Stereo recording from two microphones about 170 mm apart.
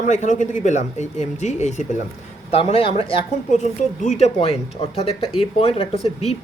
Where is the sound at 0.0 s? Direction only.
45° left (ahead or behind).